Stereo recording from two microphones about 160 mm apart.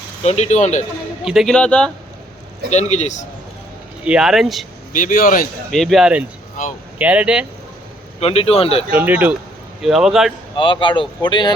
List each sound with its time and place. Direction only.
0.2 s speech: 45° left (ahead or behind)
1.2 s speech: 5° right (ahead or behind)
2.6 s speech: 45° left (ahead or behind)
4.0 s speech: 5° right (ahead or behind)
4.9 s a man's voice: 60° left (ahead or behind)
5.7 s speech: centre (ahead or behind)
8.2 s speech: 40° left (ahead or behind)
9.0 s speech: 10° right (ahead or behind)
10.6 s speech: 30° left (ahead or behind)